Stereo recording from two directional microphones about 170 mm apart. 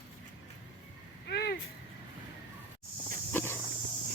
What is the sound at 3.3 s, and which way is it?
Walk, 15° left (ahead or behind).